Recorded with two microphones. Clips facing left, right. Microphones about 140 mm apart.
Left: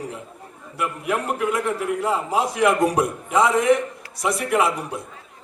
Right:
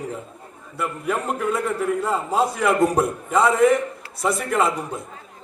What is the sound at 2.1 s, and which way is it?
Speech, 80° left.